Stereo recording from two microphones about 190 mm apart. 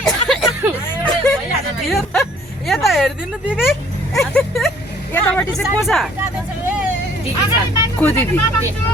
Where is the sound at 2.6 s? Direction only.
Centre (ahead or behind).